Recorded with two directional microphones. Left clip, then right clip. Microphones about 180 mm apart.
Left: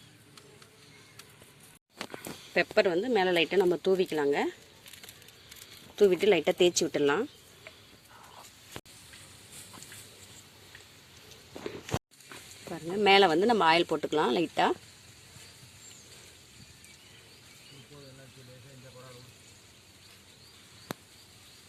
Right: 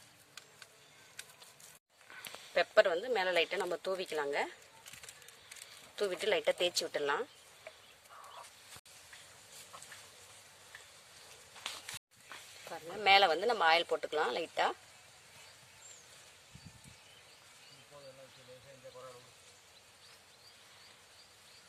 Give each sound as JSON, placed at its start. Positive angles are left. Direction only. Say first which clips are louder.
{"t": 2.6, "sound": "speech", "louder": "left 3 dB", "side_deg": 20}
{"t": 6.0, "sound": "speech", "louder": "left 10 dB", "side_deg": 25}
{"t": 12.7, "sound": "speech", "louder": "left 5 dB", "side_deg": 40}